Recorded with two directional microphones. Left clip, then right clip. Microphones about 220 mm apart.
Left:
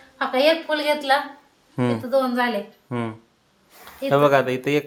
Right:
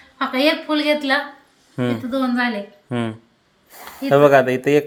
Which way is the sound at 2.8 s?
5° right (ahead or behind).